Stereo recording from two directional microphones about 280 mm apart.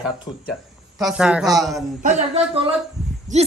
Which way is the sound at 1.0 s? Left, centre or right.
Centre.